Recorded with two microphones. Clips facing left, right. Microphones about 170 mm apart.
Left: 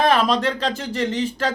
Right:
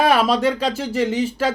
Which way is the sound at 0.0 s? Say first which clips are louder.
Right 2 dB; 10° right (ahead or behind).